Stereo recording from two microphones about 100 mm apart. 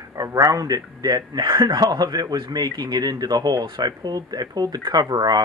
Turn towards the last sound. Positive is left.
turn(degrees=-40)  # may be behind; listen again after turning